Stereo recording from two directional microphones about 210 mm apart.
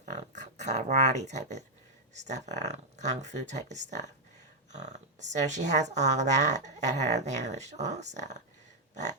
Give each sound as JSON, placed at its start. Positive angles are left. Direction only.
{"t": 0.0, "sound": "speech", "side_deg": -35}